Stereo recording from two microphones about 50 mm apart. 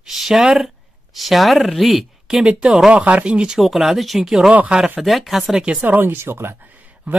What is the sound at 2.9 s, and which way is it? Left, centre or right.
Speech, right.